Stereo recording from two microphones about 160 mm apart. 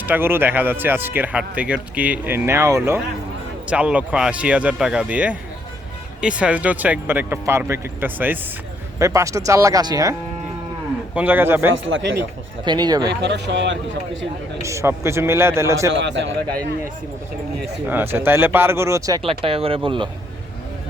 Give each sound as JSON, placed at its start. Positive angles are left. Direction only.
{"t": 0.0, "sound": "speech", "side_deg": -10}
{"t": 11.1, "sound": "speech", "side_deg": -10}
{"t": 12.6, "sound": "speech", "side_deg": -25}
{"t": 13.2, "sound": "a man's voice", "side_deg": -90}
{"t": 14.6, "sound": "speech", "side_deg": -20}
{"t": 16.0, "sound": "a man's voice", "side_deg": -90}
{"t": 17.8, "sound": "speech", "side_deg": -15}
{"t": 19.2, "sound": "speech", "side_deg": -35}